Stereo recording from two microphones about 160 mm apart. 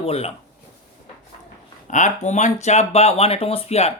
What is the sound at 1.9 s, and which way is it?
Speech, 50° left (ahead or behind).